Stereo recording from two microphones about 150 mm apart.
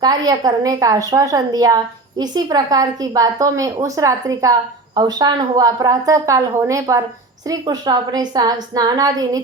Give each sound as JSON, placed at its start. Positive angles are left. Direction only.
{"t": 0.0, "sound": "a woman's voice", "side_deg": -25}